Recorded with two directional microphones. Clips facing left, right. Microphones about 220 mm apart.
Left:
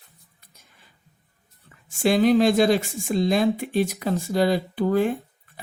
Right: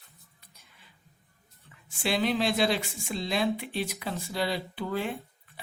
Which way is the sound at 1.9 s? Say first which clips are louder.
Left 10 dB; 45° left (ahead or behind).